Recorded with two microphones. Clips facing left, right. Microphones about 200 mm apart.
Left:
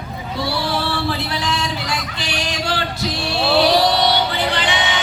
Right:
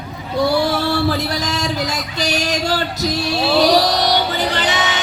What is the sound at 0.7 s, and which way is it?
Music, 40° right (ahead or behind).